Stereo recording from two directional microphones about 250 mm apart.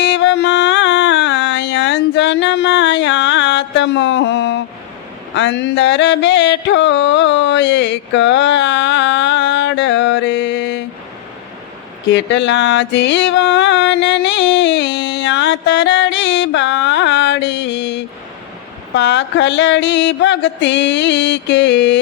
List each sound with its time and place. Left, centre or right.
0.0 s music: left
5.3 s a sound: left
12.1 s music: left
18.9 s mantra: left